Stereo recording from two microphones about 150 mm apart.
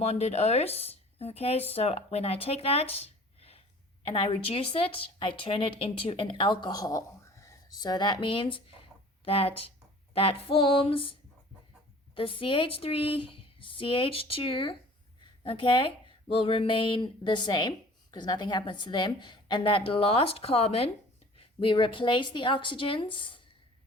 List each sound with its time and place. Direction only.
0.0 s speech: 45° left (ahead or behind)